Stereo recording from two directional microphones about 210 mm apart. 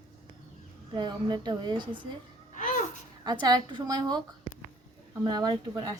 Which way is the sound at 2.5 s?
35° left (ahead or behind).